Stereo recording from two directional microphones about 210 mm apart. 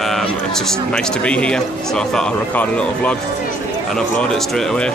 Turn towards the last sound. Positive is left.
turn(degrees=5)  # may be behind; listen again after turning